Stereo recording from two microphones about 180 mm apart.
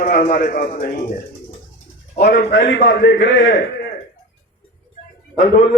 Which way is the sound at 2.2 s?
65° left (ahead or behind).